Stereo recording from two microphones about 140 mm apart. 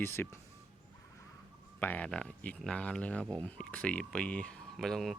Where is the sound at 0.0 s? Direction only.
15° left (ahead or behind).